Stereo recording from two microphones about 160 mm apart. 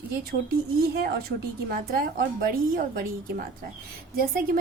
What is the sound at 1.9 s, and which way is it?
A woman's voice, 65° right (ahead or behind).